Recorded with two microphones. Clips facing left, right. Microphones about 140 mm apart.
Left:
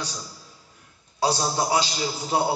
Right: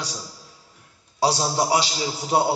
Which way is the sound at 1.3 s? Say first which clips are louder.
Right 2 dB; 30° right (ahead or behind).